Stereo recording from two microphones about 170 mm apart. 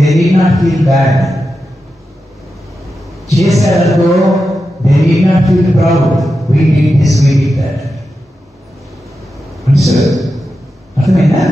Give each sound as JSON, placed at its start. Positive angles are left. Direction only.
{"t": 0.0, "sound": "speech", "side_deg": 0}
{"t": 3.3, "sound": "speech", "side_deg": 0}
{"t": 6.1, "sound": "music", "side_deg": 0}
{"t": 9.8, "sound": "a sound", "side_deg": 0}
{"t": 11.1, "sound": "speech", "side_deg": 0}